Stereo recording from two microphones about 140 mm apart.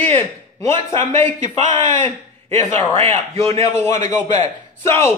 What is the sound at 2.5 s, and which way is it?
A man's voice, 15° left (ahead or behind).